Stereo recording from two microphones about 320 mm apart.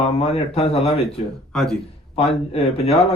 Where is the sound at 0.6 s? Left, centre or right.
Centre.